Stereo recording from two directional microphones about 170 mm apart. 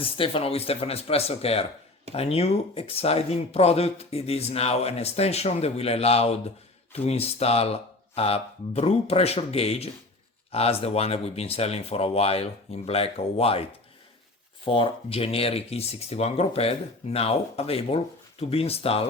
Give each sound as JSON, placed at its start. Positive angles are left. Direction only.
{"t": 0.0, "sound": "speech", "side_deg": 30}